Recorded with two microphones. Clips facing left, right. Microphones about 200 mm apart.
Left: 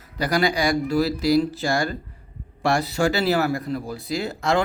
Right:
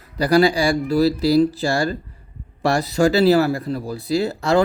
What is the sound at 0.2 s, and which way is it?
Speech, 35° right (ahead or behind).